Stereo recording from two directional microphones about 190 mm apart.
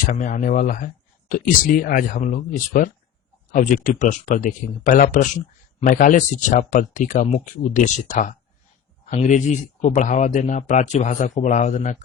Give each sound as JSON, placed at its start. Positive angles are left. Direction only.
{"t": 0.0, "sound": "speech", "side_deg": 40}